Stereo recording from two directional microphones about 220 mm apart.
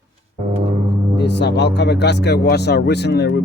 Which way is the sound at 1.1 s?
50° left (ahead or behind).